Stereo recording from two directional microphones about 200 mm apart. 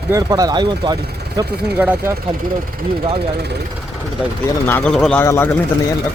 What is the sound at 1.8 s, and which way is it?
Speech, 10° right (ahead or behind).